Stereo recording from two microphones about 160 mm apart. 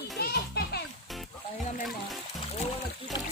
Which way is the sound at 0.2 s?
80° left.